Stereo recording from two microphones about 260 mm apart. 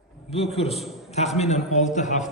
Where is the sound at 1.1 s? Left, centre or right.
Left.